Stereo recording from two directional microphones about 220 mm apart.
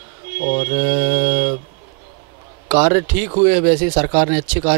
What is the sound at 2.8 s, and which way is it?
Speech, 15° right (ahead or behind).